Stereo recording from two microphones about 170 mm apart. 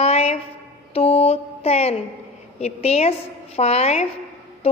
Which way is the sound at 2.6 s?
40° left (ahead or behind).